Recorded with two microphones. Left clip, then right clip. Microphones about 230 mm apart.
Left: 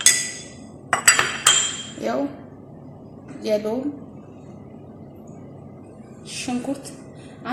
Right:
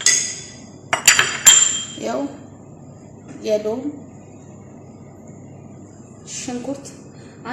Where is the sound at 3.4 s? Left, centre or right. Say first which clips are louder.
Right 2 dB; centre.